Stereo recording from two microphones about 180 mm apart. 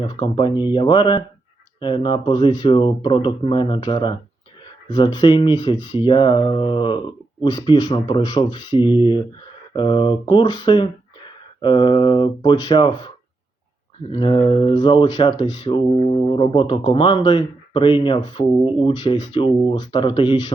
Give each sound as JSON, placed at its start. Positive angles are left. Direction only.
{"t": 0.0, "sound": "speech", "side_deg": 25}
{"t": 14.1, "sound": "speech", "side_deg": 25}